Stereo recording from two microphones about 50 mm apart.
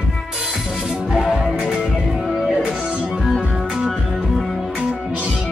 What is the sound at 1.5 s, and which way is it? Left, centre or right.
Music, right.